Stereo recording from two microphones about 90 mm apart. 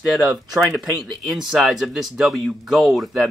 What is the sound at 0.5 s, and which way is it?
Speech, 15° right (ahead or behind).